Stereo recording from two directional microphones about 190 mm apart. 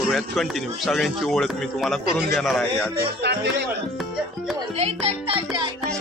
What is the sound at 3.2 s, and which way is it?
Speech, 65° right (ahead or behind).